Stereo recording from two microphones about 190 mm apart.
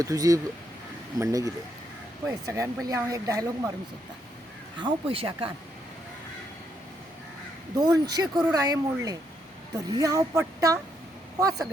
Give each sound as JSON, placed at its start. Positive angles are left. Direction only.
{"t": 0.0, "sound": "speech", "side_deg": -15}
{"t": 4.8, "sound": "speech", "side_deg": -30}
{"t": 7.8, "sound": "speech", "side_deg": -20}